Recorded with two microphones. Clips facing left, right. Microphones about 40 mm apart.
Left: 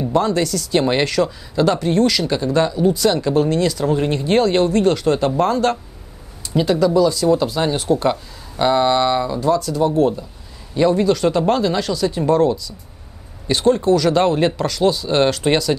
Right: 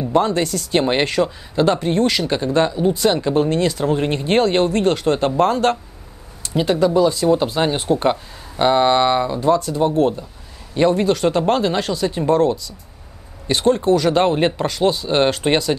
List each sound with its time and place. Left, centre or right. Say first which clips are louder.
0.1 s speech: right 1 dB; right